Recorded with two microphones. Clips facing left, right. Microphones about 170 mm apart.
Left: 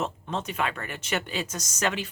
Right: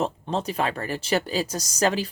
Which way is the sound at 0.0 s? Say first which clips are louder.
Right 5 dB; 35° right (ahead or behind).